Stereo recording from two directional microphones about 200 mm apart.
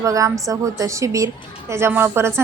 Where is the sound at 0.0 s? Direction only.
15° right (ahead or behind).